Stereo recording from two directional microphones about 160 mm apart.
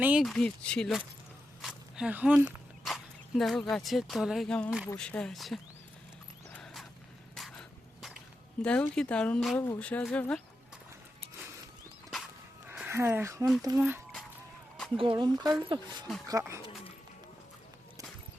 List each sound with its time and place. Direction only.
0.0 s speech: 5° right (ahead or behind)
7.3 s dog: centre (ahead or behind)
8.6 s speech: 5° left (ahead or behind)
12.6 s speech: 10° right (ahead or behind)
14.9 s speech: 35° right (ahead or behind)